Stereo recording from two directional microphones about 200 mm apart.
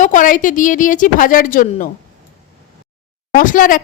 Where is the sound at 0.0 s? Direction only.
40° left (ahead or behind).